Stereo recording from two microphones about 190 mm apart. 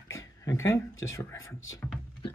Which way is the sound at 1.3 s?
90° left.